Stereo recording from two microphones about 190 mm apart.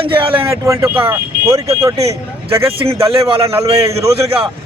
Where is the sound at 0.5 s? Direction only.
15° right (ahead or behind).